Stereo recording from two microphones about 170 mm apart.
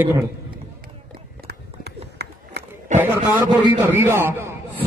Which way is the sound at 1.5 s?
75° right (ahead or behind).